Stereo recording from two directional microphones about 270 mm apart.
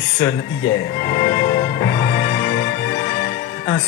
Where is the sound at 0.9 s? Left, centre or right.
Centre.